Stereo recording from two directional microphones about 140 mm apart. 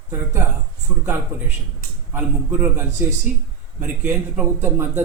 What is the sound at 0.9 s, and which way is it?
Speech, 20° right (ahead or behind).